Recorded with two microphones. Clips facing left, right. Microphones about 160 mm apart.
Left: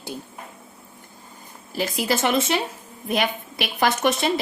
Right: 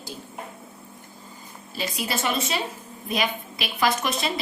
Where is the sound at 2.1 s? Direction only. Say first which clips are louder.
Left 6 dB; 85° left.